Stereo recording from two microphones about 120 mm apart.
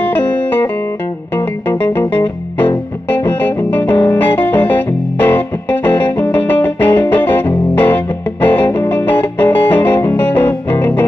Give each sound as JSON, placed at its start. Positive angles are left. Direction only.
{"t": 0.0, "sound": "music", "side_deg": 15}
{"t": 2.0, "sound": "music", "side_deg": 15}